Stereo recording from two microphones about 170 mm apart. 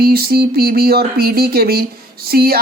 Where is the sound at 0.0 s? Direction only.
60° right (ahead or behind).